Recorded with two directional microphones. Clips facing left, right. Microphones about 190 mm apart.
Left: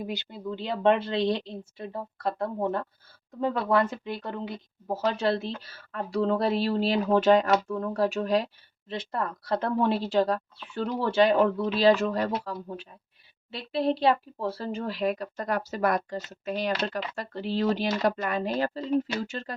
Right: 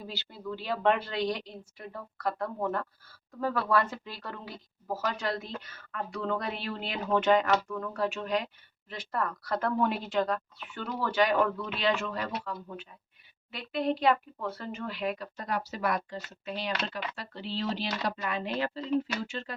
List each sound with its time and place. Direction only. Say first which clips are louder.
0.0 s a woman's voice: left 6 dB; 20° left (ahead or behind); by 19.5 s 40° left (ahead or behind)